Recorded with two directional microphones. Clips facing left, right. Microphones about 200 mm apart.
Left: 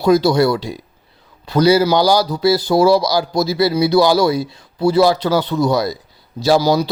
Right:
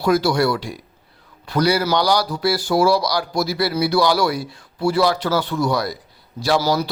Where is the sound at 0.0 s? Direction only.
20° left (ahead or behind).